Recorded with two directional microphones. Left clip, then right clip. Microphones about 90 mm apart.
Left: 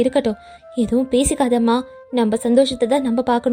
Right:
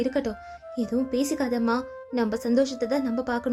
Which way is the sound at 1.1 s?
75° left (ahead or behind).